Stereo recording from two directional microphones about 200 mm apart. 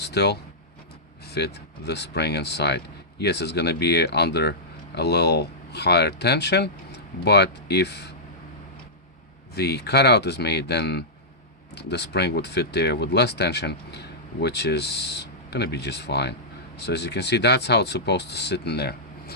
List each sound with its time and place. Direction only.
0.0 s a sound: 55° left (ahead or behind)
1.3 s speech: 55° left (ahead or behind)
9.6 s speech: 55° left (ahead or behind)